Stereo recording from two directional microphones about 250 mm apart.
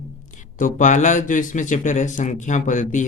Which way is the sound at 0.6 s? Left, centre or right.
Left.